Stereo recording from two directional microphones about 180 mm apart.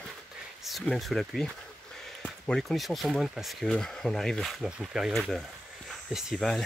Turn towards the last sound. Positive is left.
turn(degrees=5)  # may be behind; listen again after turning